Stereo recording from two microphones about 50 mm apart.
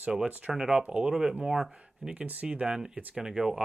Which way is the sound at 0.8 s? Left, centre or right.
Right.